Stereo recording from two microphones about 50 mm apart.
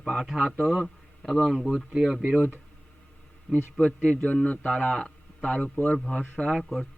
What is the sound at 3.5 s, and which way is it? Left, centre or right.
A man's voice, left.